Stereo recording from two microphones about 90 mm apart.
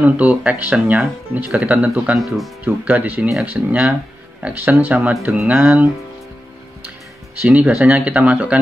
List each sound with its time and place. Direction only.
0.0 s speech: 15° right (ahead or behind)
2.1 s speech: centre (ahead or behind)
2.6 s speech: 15° right (ahead or behind)
7.4 s speech: 15° right (ahead or behind)